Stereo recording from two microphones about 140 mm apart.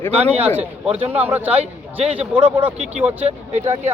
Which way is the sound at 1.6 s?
45° right (ahead or behind).